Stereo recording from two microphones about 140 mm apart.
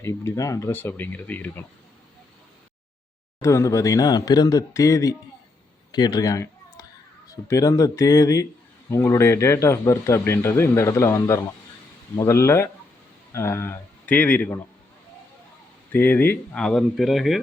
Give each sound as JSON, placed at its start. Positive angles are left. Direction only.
{"t": 0.0, "sound": "speech", "side_deg": 20}
{"t": 3.4, "sound": "speech", "side_deg": 20}
{"t": 5.9, "sound": "a sound", "side_deg": 25}
{"t": 7.3, "sound": "speech", "side_deg": 25}
{"t": 15.9, "sound": "speech", "side_deg": 15}